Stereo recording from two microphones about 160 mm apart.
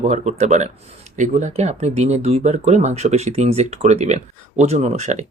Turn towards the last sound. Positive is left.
turn(degrees=-45)  # may be behind; listen again after turning